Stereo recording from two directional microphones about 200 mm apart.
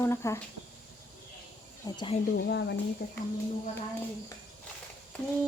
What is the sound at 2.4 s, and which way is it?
Speech, 60° left (ahead or behind).